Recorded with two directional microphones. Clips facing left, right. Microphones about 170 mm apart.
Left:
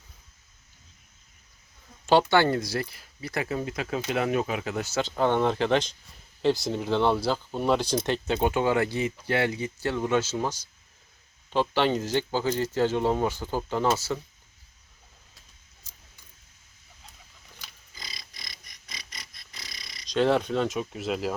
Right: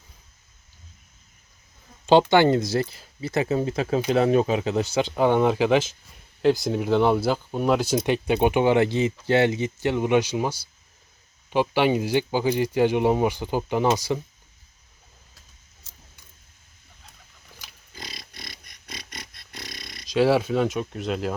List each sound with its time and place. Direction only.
2.3 s speech: 20° right (ahead or behind)
17.9 s a sound: 65° right (ahead or behind)
20.1 s speech: 5° right (ahead or behind)